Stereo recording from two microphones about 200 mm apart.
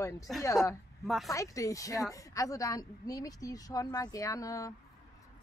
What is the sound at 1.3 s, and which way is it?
Speech, 15° left (ahead or behind).